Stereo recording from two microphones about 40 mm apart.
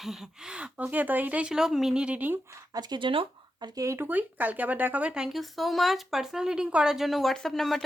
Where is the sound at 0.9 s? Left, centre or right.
Right.